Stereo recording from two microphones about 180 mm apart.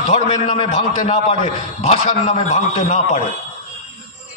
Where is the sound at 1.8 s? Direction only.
35° left (ahead or behind).